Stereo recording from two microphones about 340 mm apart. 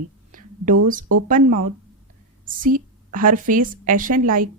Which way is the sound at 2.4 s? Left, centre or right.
Right.